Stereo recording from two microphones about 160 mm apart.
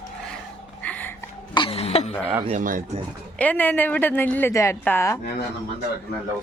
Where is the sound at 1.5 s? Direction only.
35° left (ahead or behind).